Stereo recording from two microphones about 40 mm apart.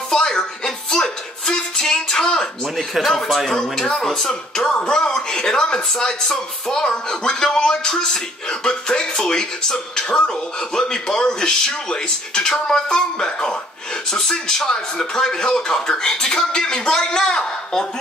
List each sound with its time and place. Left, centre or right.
0.1 s music: centre
3.3 s speech: centre